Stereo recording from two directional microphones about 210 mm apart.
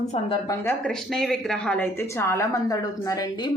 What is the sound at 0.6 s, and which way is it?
A woman's voice, 5° left (ahead or behind).